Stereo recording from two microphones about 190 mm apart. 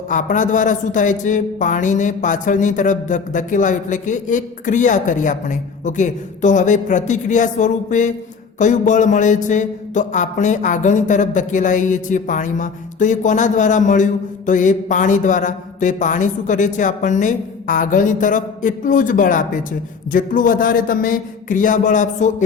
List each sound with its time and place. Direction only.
0.1 s a man's voice: 40° left (ahead or behind)